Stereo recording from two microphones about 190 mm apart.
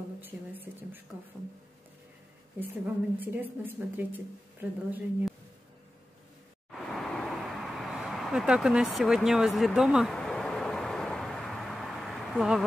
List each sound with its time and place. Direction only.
0.2 s a woman's voice: 10° right (ahead or behind)
2.7 s a woman's voice: 10° right (ahead or behind)
6.7 s a sound: centre (ahead or behind)